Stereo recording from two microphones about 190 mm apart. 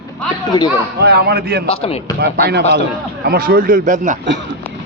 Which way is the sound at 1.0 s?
55° right (ahead or behind).